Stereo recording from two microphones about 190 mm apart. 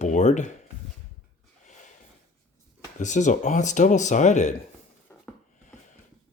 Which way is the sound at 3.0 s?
40° left (ahead or behind).